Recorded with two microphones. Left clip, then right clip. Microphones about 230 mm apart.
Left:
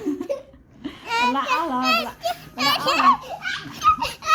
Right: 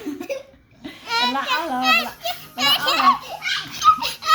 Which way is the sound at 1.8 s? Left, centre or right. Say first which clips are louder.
Right 2 dB; centre.